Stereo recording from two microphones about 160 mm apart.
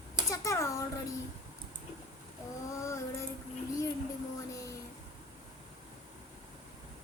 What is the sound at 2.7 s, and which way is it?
Speech, 20° left (ahead or behind).